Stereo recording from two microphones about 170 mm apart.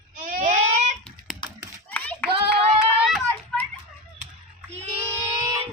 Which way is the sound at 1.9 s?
10° left (ahead or behind).